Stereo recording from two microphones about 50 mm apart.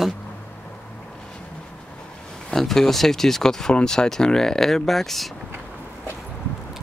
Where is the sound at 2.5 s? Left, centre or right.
Centre.